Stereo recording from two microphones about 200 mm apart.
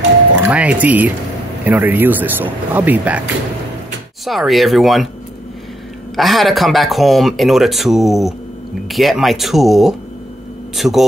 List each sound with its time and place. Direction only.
0.5 s speech: 5° right (ahead or behind)
6.1 s speech: centre (ahead or behind)